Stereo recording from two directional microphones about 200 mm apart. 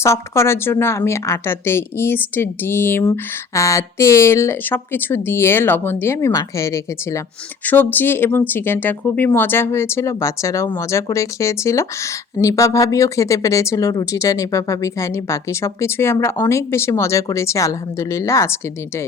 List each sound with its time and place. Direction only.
0.0 s speech: 15° left (ahead or behind)